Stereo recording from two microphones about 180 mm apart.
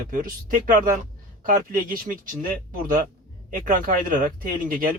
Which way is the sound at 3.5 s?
50° right (ahead or behind).